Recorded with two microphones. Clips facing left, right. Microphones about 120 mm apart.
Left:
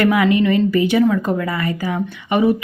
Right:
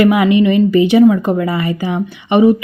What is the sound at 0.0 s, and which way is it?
A woman's voice, 20° right (ahead or behind).